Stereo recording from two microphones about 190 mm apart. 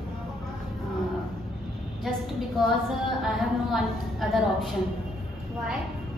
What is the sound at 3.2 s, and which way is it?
A woman's voice, centre (ahead or behind).